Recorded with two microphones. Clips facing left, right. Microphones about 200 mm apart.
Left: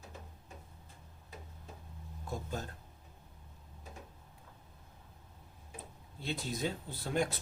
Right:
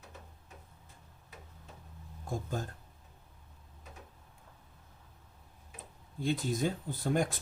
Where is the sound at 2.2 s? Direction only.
50° right (ahead or behind).